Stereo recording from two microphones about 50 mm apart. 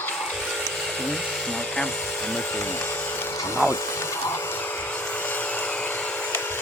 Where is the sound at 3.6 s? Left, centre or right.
Left.